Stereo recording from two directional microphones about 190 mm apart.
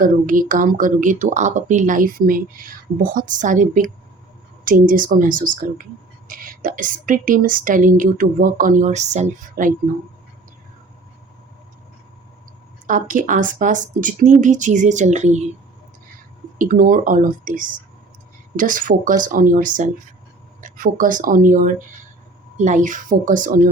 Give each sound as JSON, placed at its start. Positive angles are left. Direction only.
{"t": 0.0, "sound": "a woman's voice", "side_deg": -45}
{"t": 12.9, "sound": "speech", "side_deg": -45}
{"t": 16.6, "sound": "a woman's voice", "side_deg": -45}